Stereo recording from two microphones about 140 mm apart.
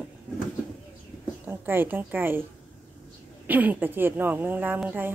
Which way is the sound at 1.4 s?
15° right (ahead or behind).